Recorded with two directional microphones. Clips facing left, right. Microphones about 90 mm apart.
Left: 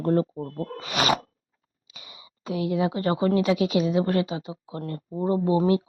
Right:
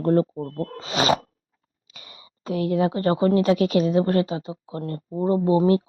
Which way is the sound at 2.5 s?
45° right (ahead or behind).